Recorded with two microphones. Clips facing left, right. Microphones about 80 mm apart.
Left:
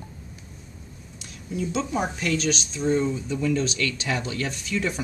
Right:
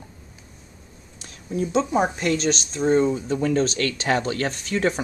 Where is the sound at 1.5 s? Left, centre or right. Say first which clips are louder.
Right 5 dB; right.